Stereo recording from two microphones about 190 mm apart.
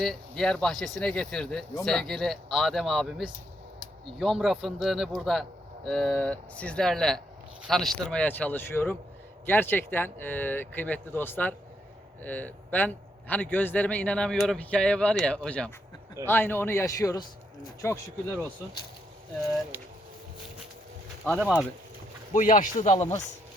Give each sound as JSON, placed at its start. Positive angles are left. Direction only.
{"t": 0.0, "sound": "a man's voice", "side_deg": 0}
{"t": 21.2, "sound": "a man's voice", "side_deg": -5}
{"t": 22.3, "sound": "speech", "side_deg": 45}